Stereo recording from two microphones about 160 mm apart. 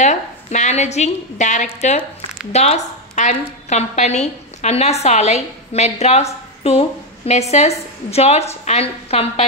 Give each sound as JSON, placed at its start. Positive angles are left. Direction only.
{"t": 0.0, "sound": "a woman's voice", "side_deg": 45}